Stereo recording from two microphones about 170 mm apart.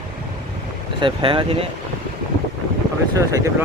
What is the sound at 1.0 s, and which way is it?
Speech, 30° right (ahead or behind).